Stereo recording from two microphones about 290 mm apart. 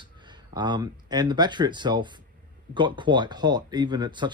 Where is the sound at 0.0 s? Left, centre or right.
Centre.